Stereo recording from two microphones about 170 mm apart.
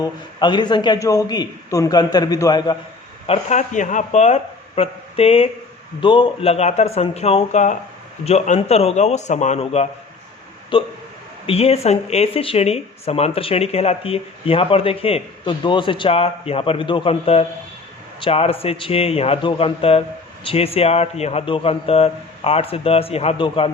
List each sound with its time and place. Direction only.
0.0 s a man's voice: 25° left (ahead or behind)
3.2 s a man's voice: 40° left (ahead or behind)